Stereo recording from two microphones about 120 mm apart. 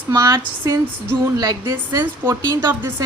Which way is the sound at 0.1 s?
30° right (ahead or behind).